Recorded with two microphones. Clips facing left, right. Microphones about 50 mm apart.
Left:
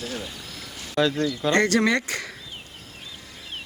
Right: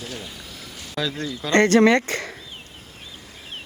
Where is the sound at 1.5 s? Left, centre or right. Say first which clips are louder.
Right 7 dB; right.